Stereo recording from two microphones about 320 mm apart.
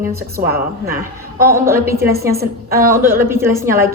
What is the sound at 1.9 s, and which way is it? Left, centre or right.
Speech, right.